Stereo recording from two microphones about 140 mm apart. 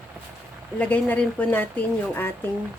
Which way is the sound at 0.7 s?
10° left (ahead or behind).